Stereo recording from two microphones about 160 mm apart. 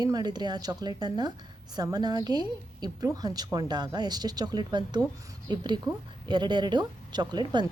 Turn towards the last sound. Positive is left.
turn(degrees=-25)  # may be behind; listen again after turning